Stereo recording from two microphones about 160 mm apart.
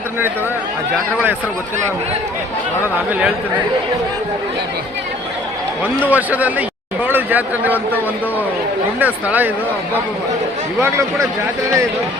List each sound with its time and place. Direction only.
3.1 s speech: 10° right (ahead or behind)
6.1 s a man's voice: 10° right (ahead or behind)
9.0 s speech: 10° right (ahead or behind)